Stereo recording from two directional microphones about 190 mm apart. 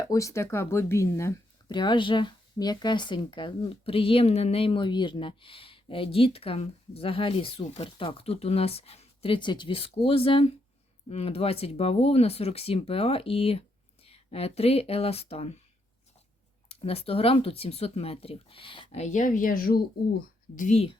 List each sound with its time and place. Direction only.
0.1 s speech: 15° left (ahead or behind); by 15.5 s 35° left (ahead or behind)
16.6 s speech: 30° left (ahead or behind)